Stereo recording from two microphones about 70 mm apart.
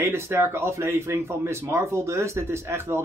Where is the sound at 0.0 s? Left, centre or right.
Right.